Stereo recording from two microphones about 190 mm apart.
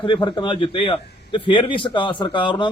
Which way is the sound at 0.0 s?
25° left (ahead or behind).